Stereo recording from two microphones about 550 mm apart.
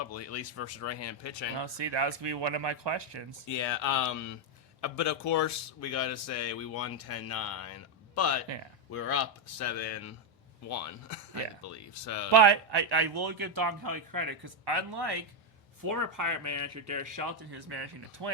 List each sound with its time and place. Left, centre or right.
0.1 s speech: left
1.5 s speech: right
3.4 s speech: left
12.3 s a man's voice: right
15.8 s a man's voice: right